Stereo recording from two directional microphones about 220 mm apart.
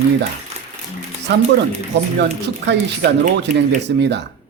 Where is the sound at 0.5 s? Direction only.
30° right (ahead or behind).